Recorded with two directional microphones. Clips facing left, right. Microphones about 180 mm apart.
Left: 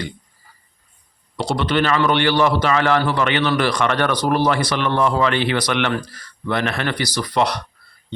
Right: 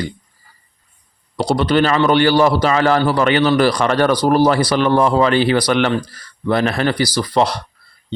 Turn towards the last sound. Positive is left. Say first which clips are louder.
# right 3 dB
turn(degrees=-30)  # may be behind; listen again after turning